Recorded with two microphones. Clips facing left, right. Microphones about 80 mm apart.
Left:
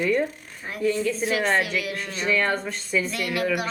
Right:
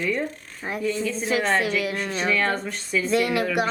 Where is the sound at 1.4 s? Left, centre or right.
Centre.